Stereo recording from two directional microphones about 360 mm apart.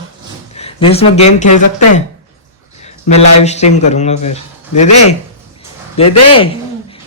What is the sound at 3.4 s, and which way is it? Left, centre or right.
Speech, centre.